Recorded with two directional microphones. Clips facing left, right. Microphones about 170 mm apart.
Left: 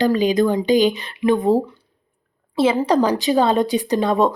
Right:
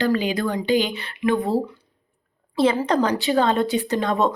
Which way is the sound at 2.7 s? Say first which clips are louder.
Left 3 dB; 15° left (ahead or behind).